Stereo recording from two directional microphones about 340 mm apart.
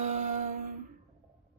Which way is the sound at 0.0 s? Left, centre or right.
Right.